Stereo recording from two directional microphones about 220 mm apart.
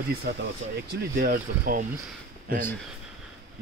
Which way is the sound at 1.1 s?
40° right (ahead or behind).